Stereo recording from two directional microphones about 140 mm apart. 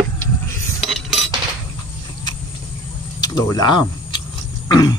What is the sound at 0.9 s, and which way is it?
Cutlery, centre (ahead or behind).